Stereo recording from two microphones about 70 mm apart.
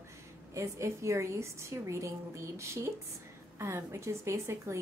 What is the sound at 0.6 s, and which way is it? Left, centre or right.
A woman's voice, right.